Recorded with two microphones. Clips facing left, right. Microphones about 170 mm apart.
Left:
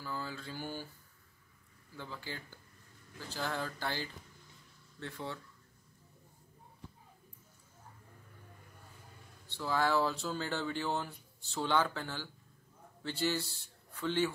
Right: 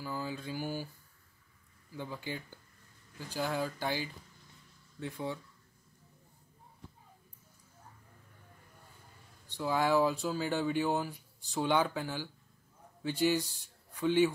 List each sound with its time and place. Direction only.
0.0 s speech: 15° right (ahead or behind)
2.0 s speech: 15° right (ahead or behind)
9.5 s a man's voice: 15° right (ahead or behind)